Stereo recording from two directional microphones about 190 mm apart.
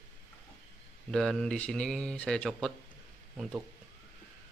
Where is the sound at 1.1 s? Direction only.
5° left (ahead or behind).